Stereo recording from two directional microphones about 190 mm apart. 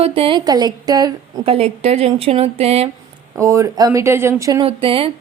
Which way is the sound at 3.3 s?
15° right (ahead or behind).